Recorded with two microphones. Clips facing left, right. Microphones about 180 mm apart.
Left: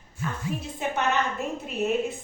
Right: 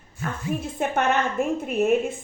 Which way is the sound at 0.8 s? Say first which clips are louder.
Right 3 dB; 50° right (ahead or behind).